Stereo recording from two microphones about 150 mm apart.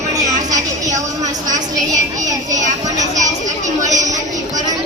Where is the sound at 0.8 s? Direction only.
25° right (ahead or behind).